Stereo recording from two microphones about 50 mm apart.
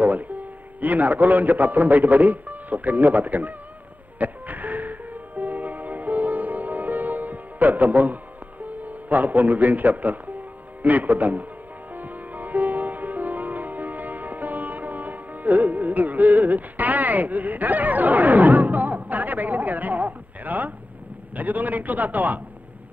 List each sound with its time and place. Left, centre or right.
0.0 s a man's voice: right
4.2 s music: right
8.8 s a man's voice: right
11.9 s music: right
21.4 s a man's voice: right